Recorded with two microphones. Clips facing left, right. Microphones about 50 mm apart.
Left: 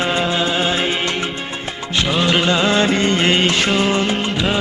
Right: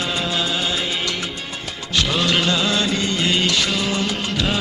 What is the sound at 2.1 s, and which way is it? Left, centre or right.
Music, left.